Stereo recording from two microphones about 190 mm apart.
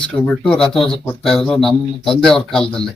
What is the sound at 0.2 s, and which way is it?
Speech, 5° left (ahead or behind).